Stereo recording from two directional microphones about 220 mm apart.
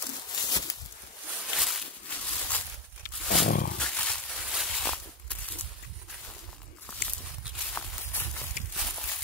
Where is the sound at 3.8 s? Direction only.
5° left (ahead or behind).